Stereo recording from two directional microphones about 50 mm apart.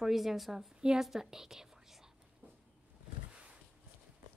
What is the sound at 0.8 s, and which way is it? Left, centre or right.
Whispering, centre.